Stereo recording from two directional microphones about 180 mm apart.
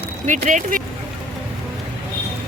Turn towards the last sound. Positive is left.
turn(degrees=-45)  # may be behind; listen again after turning